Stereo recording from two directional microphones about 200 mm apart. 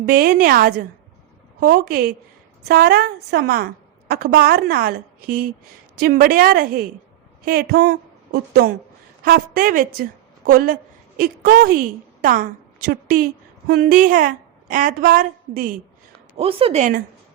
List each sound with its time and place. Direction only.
0.1 s a woman's voice: 50° right (ahead or behind)
16.4 s speech: 30° right (ahead or behind)